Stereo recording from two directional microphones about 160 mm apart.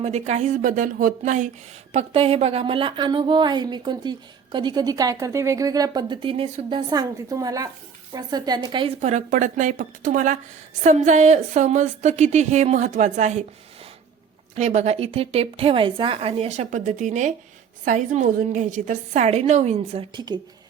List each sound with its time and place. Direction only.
0.0 s a woman's voice: 45° right (ahead or behind)
1.9 s a woman's voice: 40° right (ahead or behind)
9.0 s a woman's voice: 45° right (ahead or behind)
14.5 s a woman's voice: 45° right (ahead or behind); by 20.4 s 30° right (ahead or behind)